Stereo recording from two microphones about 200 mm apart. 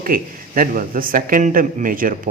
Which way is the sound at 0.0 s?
45° right (ahead or behind).